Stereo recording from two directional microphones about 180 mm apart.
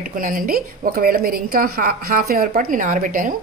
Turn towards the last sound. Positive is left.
turn(degrees=-50)  # may be behind; listen again after turning